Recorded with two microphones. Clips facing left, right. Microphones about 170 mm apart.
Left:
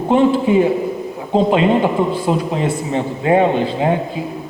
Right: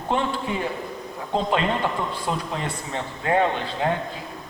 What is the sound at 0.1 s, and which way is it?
A man's voice, 15° left (ahead or behind).